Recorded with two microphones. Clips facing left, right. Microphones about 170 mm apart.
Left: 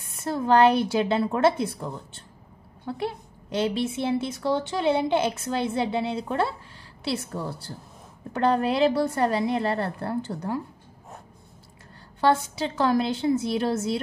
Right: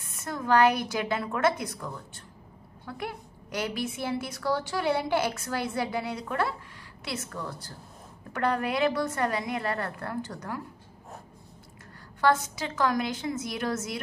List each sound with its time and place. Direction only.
0.1 s a woman's voice: 30° left (ahead or behind)
12.2 s a woman's voice: 30° left (ahead or behind)